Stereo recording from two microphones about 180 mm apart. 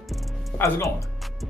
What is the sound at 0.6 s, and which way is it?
Speech, 15° left (ahead or behind).